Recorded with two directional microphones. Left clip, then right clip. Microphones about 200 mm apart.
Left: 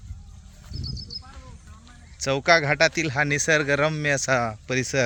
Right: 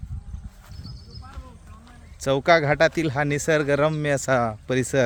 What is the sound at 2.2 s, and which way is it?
Speech, 20° right (ahead or behind).